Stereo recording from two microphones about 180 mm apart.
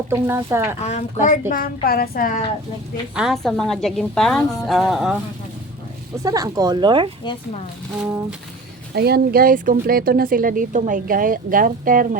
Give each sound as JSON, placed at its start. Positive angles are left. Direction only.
{"t": 0.1, "sound": "speech", "side_deg": -15}
{"t": 0.8, "sound": "a woman's voice", "side_deg": 40}
{"t": 3.2, "sound": "a woman's voice", "side_deg": 0}
{"t": 6.1, "sound": "speech", "side_deg": -20}
{"t": 9.0, "sound": "speech", "side_deg": -60}